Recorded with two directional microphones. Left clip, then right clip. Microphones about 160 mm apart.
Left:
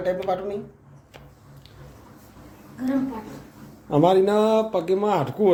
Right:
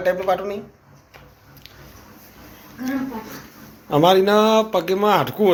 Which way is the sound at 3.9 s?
5° left (ahead or behind).